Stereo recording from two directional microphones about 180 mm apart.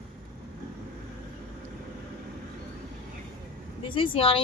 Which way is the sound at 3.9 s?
30° left (ahead or behind).